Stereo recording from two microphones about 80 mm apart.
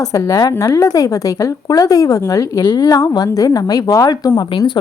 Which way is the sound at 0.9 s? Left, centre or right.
Left.